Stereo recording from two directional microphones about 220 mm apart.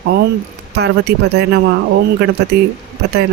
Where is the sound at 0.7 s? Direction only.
50° right (ahead or behind).